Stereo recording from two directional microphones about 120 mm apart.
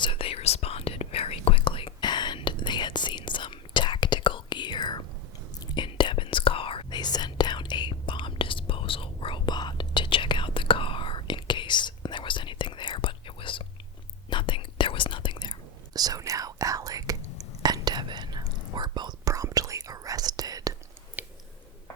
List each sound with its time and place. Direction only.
0.0 s whispering: 50° left (ahead or behind)
15.9 s whispering: 30° right (ahead or behind)